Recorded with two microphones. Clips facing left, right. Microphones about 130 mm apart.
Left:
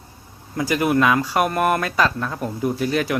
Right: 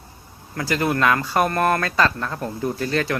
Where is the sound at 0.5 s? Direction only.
15° left (ahead or behind).